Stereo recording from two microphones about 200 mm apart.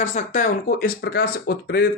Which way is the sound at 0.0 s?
35° left (ahead or behind).